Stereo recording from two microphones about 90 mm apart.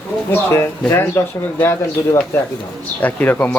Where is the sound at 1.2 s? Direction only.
25° left (ahead or behind).